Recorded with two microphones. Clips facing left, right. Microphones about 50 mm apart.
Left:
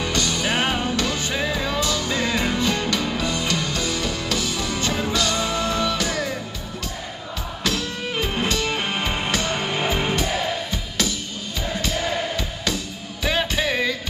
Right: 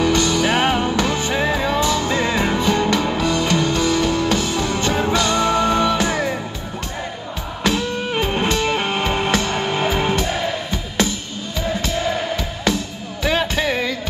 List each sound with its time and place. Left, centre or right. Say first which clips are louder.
0.0 s music: right 7 dB; right
7.6 s music: right 6 dB; right
13.4 s music: right 2 dB; centre